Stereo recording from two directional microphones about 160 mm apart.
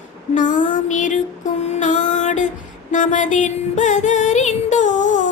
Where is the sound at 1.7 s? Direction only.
50° left (ahead or behind).